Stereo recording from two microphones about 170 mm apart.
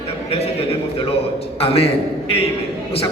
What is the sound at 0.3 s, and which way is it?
Speech, 35° left (ahead or behind).